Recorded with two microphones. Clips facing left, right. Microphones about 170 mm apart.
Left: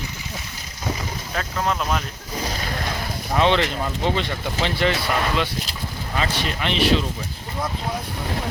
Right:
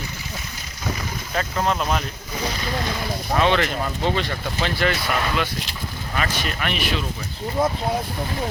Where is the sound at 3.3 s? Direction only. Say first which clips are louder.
Left 1 dB; 20° left (ahead or behind).